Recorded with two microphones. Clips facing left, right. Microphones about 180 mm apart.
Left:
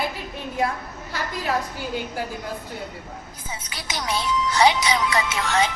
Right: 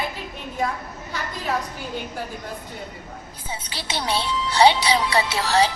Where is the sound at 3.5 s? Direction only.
30° right (ahead or behind).